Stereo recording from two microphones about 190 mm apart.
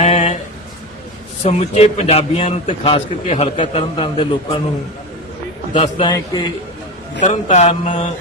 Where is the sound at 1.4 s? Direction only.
35° left (ahead or behind).